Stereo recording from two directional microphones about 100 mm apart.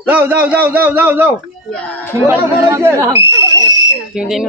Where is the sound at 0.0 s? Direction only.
20° right (ahead or behind).